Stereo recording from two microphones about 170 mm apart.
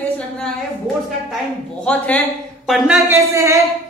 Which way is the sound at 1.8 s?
10° left (ahead or behind).